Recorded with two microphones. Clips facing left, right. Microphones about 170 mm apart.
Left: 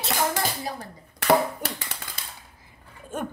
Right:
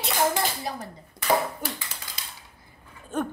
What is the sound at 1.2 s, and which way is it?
Hands, 70° left (ahead or behind).